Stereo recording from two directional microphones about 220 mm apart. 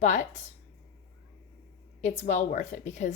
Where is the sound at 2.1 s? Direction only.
30° left (ahead or behind).